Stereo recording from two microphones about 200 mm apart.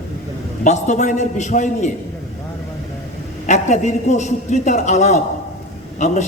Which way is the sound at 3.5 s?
35° left (ahead or behind).